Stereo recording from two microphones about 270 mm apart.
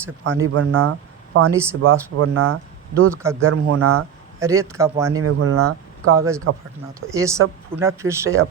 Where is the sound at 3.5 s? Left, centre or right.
Right.